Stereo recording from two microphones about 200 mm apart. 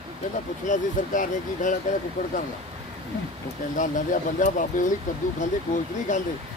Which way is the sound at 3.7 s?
40° left (ahead or behind).